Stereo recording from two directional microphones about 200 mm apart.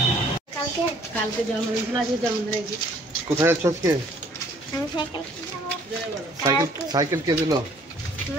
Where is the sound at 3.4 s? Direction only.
15° right (ahead or behind).